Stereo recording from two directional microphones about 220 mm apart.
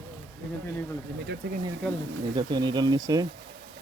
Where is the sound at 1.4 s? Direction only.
45° right (ahead or behind).